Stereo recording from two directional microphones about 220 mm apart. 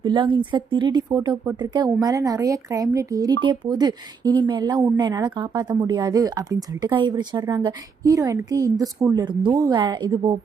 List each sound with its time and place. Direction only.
0.0 s speech: 20° right (ahead or behind)